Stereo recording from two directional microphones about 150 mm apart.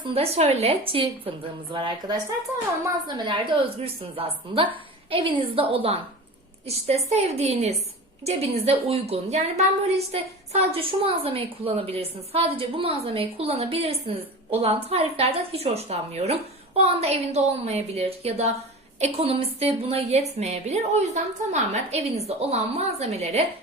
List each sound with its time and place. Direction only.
0.0 s a woman's voice: 40° right (ahead or behind)